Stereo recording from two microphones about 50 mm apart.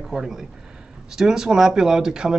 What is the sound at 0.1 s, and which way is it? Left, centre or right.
Speech, centre.